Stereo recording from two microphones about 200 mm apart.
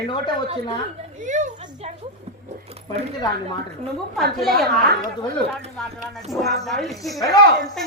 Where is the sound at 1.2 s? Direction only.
40° right (ahead or behind).